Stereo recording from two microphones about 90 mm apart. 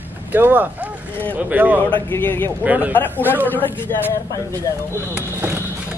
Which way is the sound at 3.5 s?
25° left (ahead or behind).